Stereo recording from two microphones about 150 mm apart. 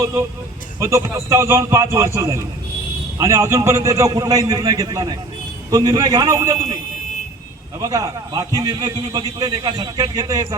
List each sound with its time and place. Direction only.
0.0 s a man's voice: 20° right (ahead or behind)
7.8 s a man's voice: 20° right (ahead or behind)